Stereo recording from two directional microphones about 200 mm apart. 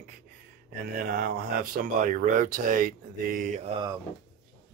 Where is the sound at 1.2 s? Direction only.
45° right (ahead or behind).